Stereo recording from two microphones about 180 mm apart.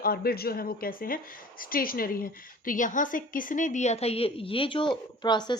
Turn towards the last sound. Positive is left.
turn(degrees=25)  # may be behind; listen again after turning